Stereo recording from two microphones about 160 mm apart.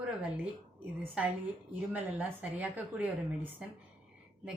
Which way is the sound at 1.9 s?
10° right (ahead or behind).